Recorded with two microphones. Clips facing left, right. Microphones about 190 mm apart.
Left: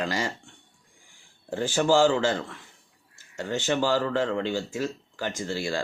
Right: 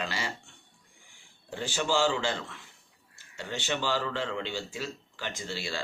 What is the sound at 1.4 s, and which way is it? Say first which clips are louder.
Speech: left 8 dB; 45° left (ahead or behind).